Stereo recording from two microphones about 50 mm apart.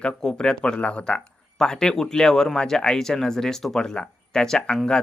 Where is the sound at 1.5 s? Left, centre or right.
Centre.